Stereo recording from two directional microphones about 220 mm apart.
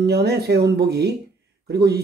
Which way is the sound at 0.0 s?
45° right (ahead or behind).